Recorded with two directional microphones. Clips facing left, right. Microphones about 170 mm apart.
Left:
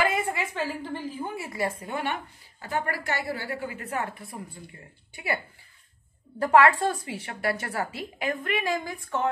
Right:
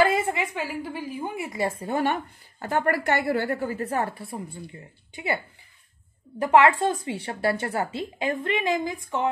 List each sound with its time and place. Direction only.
0.0 s a woman's voice: 25° right (ahead or behind)
2.6 s a woman's voice: 55° right (ahead or behind); by 5.4 s 20° right (ahead or behind)
6.4 s a woman's voice: 20° right (ahead or behind)